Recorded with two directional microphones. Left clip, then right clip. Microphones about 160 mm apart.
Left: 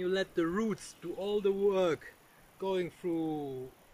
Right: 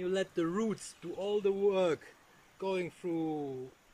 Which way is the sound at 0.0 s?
5° right (ahead or behind).